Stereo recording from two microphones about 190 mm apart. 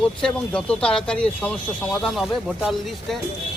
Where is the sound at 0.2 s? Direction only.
5° left (ahead or behind).